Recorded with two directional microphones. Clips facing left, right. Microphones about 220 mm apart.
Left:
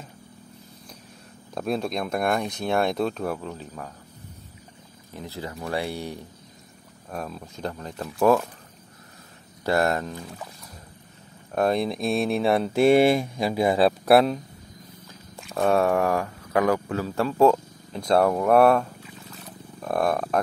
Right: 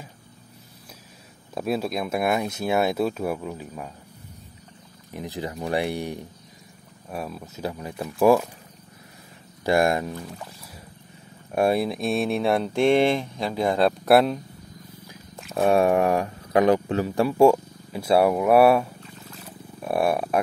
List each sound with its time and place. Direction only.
1.5 s speech: 5° right (ahead or behind)
5.1 s speech: 15° right (ahead or behind)
9.7 s speech: 15° right (ahead or behind)
11.5 s speech: 10° right (ahead or behind)
15.5 s speech: 15° right (ahead or behind)
19.4 s wild animals: 10° right (ahead or behind)